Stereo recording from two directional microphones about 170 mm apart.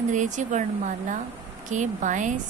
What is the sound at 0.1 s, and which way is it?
Speech, 45° right (ahead or behind).